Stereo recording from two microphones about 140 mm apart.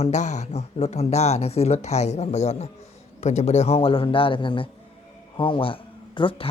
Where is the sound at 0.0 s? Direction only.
55° left (ahead or behind).